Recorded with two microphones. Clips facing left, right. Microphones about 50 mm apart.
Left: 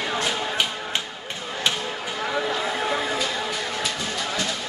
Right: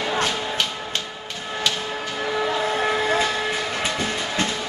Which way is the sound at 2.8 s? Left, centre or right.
Right.